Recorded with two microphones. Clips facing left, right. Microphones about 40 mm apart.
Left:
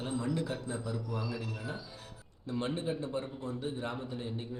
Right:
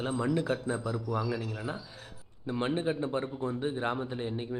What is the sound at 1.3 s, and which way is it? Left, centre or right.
Speech, centre.